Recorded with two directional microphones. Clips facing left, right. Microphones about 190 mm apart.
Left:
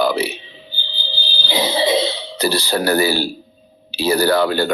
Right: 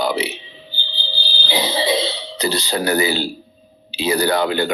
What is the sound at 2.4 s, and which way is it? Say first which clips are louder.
Speech: left 2 dB; 20° right (ahead or behind).